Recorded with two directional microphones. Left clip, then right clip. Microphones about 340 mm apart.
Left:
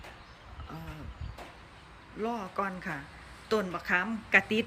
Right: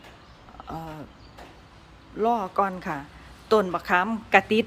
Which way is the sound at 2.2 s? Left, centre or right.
Centre.